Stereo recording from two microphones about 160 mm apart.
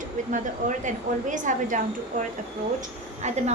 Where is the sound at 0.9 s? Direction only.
50° right (ahead or behind).